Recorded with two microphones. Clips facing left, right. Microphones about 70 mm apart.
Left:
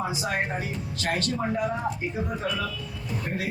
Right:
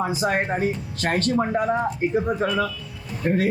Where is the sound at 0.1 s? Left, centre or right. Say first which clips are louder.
Right 6 dB; right.